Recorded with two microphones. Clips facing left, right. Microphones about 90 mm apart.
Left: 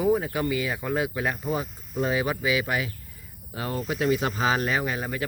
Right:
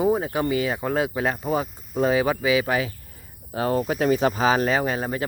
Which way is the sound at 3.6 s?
45° right (ahead or behind).